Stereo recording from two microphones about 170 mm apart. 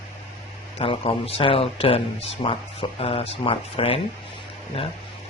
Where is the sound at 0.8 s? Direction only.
35° left (ahead or behind).